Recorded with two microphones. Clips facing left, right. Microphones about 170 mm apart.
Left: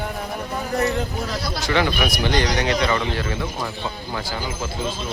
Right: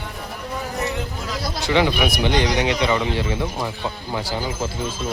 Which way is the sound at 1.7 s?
15° right (ahead or behind).